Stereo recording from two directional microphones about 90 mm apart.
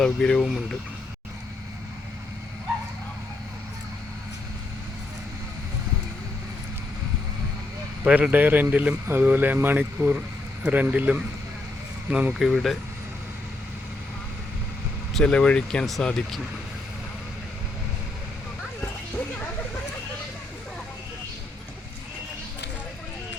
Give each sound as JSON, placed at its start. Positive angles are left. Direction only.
{"t": 0.0, "sound": "speech", "side_deg": 10}
{"t": 0.4, "sound": "speech", "side_deg": 0}
{"t": 8.0, "sound": "speech", "side_deg": -15}
{"t": 12.3, "sound": "speech", "side_deg": 0}
{"t": 15.2, "sound": "speech", "side_deg": 10}